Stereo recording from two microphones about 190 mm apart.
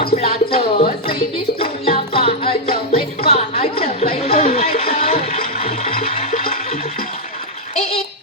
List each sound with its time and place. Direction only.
0.2 s music: 30° left (ahead or behind)
4.0 s a sound: 30° left (ahead or behind)
6.0 s water: 30° left (ahead or behind)